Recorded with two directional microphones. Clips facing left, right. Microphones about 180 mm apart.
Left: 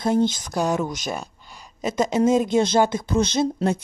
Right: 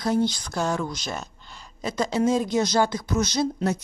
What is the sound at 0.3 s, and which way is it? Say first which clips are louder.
Speech: left 3 dB; 15° left (ahead or behind).